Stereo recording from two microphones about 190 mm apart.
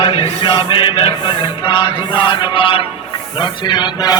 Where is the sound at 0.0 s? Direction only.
30° left (ahead or behind).